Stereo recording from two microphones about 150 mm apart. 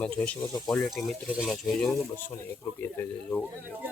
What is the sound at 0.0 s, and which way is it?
Speech, 10° left (ahead or behind).